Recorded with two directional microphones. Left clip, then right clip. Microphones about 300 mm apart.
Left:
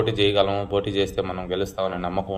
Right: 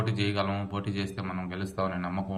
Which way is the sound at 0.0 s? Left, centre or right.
Centre.